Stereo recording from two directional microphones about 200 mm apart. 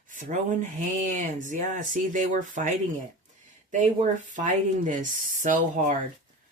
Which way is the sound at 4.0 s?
40° right (ahead or behind).